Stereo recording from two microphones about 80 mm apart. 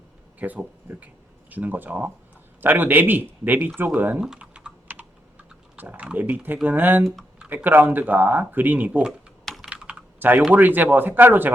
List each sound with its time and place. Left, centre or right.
0.3 s speech: right
4.2 s typing: centre
5.7 s speech: right
7.0 s speech: centre
7.5 s speech: right
9.6 s typing: centre
10.5 s speech: right